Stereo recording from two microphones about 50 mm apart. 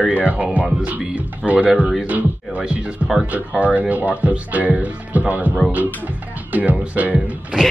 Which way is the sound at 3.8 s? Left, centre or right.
Right.